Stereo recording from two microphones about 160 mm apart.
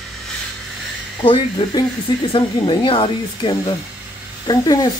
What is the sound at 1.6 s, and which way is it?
Speech, 35° left (ahead or behind).